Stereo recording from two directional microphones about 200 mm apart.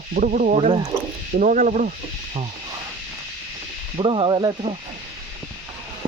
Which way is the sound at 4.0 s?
25° right (ahead or behind).